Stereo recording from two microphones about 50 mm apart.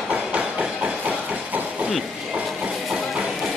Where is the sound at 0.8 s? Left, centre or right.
Right.